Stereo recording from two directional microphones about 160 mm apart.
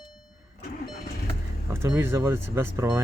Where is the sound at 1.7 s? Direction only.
15° right (ahead or behind).